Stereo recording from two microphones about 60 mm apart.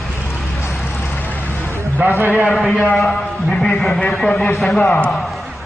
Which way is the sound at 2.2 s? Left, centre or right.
Right.